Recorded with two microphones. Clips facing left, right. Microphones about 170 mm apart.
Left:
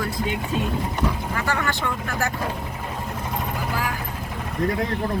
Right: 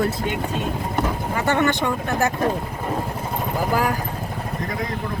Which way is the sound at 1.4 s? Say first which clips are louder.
Right 7 dB; 25° right (ahead or behind).